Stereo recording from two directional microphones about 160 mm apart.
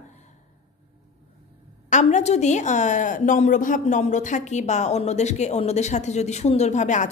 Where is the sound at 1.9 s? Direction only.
45° left (ahead or behind).